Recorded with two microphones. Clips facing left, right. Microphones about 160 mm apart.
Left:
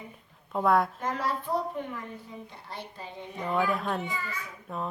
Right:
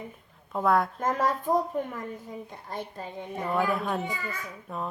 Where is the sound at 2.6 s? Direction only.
45° right (ahead or behind).